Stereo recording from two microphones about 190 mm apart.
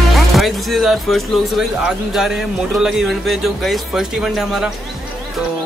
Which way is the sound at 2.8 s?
Centre (ahead or behind).